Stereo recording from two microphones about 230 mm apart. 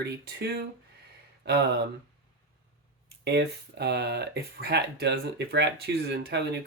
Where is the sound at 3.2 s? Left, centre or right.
Right.